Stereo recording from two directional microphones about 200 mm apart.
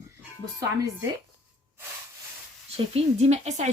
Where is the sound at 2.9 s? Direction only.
35° right (ahead or behind).